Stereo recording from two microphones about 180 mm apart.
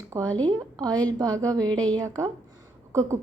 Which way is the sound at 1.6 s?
5° left (ahead or behind).